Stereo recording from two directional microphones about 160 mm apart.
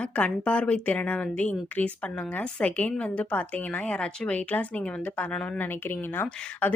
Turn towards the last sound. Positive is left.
turn(degrees=10)  # may be behind; listen again after turning